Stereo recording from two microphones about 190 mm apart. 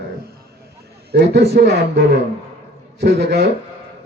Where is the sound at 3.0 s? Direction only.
60° right (ahead or behind).